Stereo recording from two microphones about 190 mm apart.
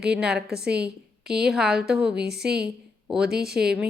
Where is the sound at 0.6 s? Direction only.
60° right (ahead or behind).